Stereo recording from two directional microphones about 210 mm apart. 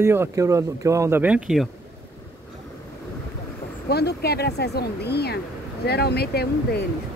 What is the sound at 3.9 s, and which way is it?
Speech, 50° left (ahead or behind).